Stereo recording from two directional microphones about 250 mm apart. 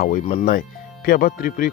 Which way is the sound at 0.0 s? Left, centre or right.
Left.